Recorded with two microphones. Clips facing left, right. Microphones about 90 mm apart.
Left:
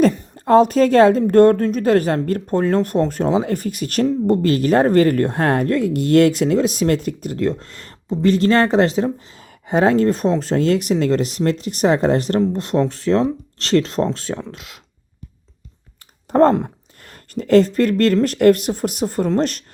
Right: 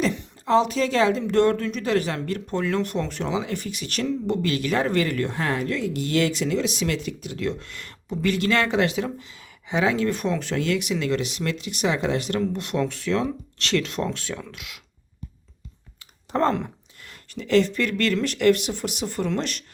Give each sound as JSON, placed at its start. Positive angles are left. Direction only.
{"t": 0.0, "sound": "a woman's voice", "side_deg": 45}
{"t": 16.3, "sound": "a woman's voice", "side_deg": 40}